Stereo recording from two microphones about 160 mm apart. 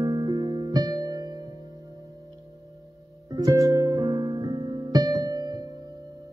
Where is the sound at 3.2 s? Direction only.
20° right (ahead or behind).